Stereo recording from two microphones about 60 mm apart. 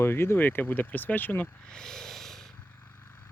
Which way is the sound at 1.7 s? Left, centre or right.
Centre.